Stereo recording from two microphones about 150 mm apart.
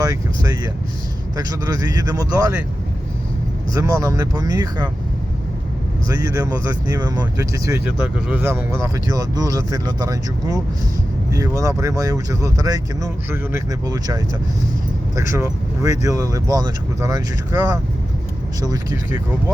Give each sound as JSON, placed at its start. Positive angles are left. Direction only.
{"t": 0.0, "sound": "speech", "side_deg": -25}
{"t": 3.8, "sound": "speech", "side_deg": -20}
{"t": 6.1, "sound": "speech", "side_deg": -20}
{"t": 7.9, "sound": "speech", "side_deg": -10}